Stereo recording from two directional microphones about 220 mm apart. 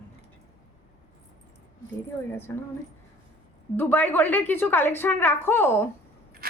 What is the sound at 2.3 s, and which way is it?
Speech, 10° left (ahead or behind).